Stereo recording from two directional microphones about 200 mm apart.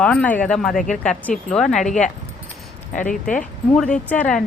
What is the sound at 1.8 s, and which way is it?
Speech, 40° left (ahead or behind).